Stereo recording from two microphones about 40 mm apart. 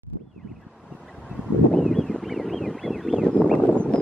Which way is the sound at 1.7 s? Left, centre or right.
Centre.